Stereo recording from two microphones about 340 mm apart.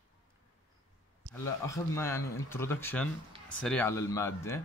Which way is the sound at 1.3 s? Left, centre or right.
Centre.